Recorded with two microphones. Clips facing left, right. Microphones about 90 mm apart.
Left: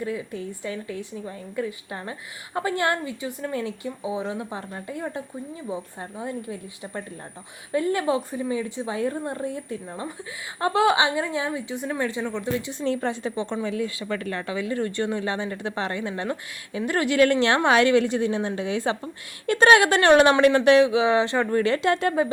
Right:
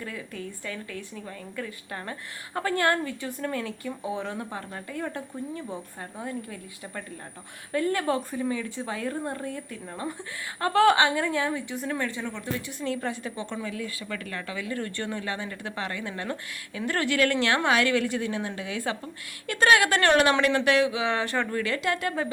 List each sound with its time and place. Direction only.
0.0 s speech: 20° left (ahead or behind)
9.8 s a woman's voice: 10° left (ahead or behind)
11.7 s a woman's voice: centre (ahead or behind)
11.9 s speech: 15° left (ahead or behind)
21.5 s speech: 30° left (ahead or behind)